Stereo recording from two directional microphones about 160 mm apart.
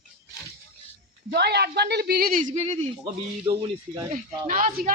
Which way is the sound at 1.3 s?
90° right.